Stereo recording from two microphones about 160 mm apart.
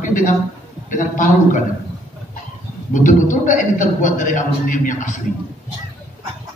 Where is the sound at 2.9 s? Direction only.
55° left (ahead or behind).